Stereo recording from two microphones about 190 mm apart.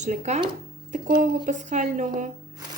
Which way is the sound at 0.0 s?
40° right (ahead or behind).